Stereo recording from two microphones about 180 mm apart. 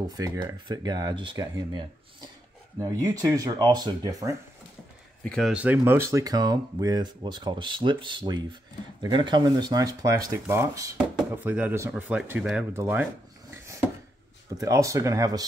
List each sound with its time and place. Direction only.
0.1 s speech: 15° right (ahead or behind)
5.2 s a man's voice: 5° left (ahead or behind)
5.5 s speech: 10° right (ahead or behind)
13.5 s a sound: 15° right (ahead or behind)
14.6 s speech: 20° right (ahead or behind)